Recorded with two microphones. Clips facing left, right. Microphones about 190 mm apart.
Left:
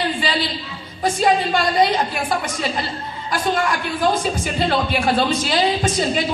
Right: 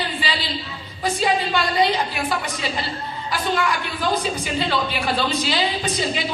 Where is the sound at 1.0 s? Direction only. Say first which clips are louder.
Left 4 dB; 45° left (ahead or behind).